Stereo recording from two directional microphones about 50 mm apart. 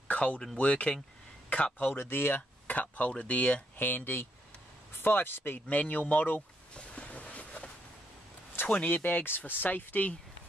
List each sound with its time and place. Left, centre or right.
0.1 s a sound: left
0.6 s speech: left
2.0 s speech: left
3.7 s speech: left
6.7 s a sound: left
8.6 s speech: left